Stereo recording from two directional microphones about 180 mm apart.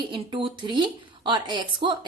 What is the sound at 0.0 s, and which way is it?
Speech, 30° right (ahead or behind).